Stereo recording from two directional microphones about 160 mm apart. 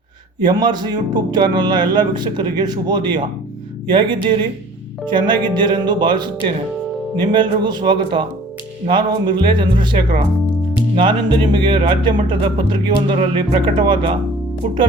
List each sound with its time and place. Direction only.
0.4 s speech: 25° right (ahead or behind)